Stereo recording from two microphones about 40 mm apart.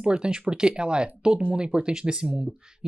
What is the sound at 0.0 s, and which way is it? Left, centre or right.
Speech, right.